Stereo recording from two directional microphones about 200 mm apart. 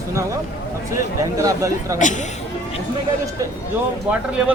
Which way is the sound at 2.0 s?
40° left (ahead or behind).